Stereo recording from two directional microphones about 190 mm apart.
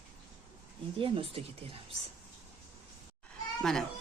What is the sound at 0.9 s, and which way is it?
Speech, 30° right (ahead or behind).